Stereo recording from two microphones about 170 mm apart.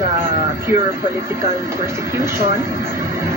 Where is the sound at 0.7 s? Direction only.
15° right (ahead or behind).